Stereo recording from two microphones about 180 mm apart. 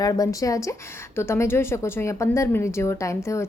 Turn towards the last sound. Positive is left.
turn(degrees=15)  # may be behind; listen again after turning